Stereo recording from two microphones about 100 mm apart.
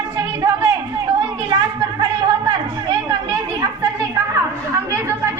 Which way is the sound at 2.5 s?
40° right (ahead or behind).